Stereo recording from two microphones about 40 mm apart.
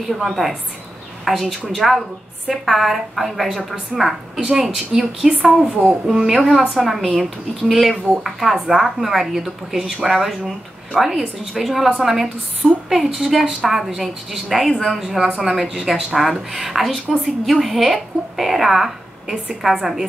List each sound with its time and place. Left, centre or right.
0.2 s a woman's voice: centre
4.4 s speech: right
4.6 s a woman's voice: centre
5.8 s speech: right
6.1 s a woman's voice: centre
15.0 s a woman's voice: centre